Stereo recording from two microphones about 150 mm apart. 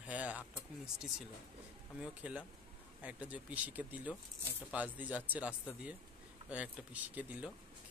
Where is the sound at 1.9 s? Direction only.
10° right (ahead or behind).